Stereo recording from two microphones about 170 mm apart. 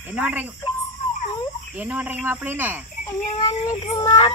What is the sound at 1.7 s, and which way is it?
Speech, 10° right (ahead or behind).